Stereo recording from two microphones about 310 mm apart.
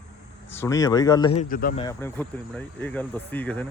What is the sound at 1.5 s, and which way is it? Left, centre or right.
Speech, left.